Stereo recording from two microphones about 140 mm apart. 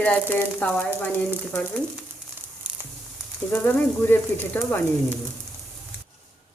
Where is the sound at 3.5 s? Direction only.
15° left (ahead or behind).